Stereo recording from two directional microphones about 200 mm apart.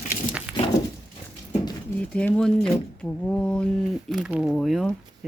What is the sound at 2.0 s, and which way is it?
Speech, 5° left (ahead or behind).